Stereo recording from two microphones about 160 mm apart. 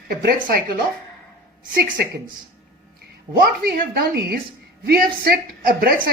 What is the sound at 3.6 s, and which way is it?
A woman's voice, 70° right (ahead or behind).